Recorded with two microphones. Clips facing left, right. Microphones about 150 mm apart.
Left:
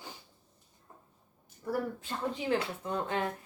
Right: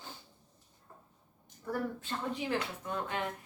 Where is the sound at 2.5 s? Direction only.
25° left (ahead or behind).